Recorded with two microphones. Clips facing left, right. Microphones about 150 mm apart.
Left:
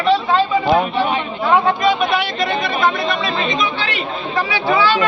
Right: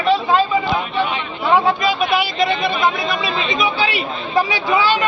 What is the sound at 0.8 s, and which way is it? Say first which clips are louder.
Speech: left 3 dB; 45° left (ahead or behind).